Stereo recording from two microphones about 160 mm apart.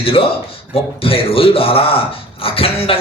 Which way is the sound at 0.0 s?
35° left (ahead or behind).